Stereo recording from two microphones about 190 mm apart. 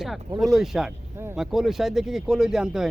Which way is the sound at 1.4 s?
Centre (ahead or behind).